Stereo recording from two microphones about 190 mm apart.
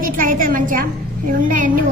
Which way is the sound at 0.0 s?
45° right (ahead or behind).